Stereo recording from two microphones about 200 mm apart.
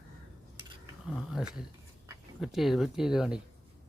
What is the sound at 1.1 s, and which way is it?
Speech, centre (ahead or behind).